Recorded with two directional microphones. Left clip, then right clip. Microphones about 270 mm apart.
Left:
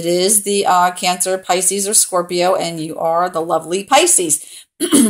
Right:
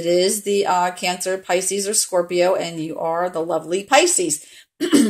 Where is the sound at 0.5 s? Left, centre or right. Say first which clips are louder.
Left 5 dB; left.